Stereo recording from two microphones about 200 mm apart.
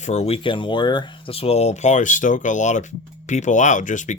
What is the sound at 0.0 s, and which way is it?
Speech, 35° left (ahead or behind).